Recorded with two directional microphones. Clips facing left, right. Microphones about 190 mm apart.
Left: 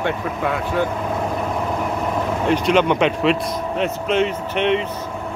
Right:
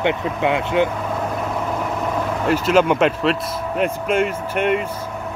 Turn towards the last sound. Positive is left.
turn(degrees=-5)  # may be behind; listen again after turning